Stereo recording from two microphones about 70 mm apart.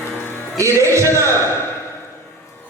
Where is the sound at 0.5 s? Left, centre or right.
Right.